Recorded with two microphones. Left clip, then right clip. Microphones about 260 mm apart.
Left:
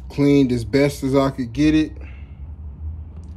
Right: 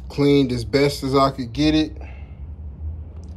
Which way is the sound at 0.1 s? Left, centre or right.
Centre.